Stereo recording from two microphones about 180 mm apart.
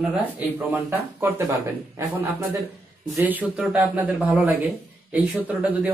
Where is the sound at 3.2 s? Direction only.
10° right (ahead or behind).